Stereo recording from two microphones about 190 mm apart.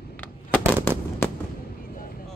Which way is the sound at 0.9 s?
10° left (ahead or behind).